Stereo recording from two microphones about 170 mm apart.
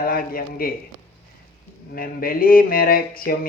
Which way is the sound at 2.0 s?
55° left (ahead or behind).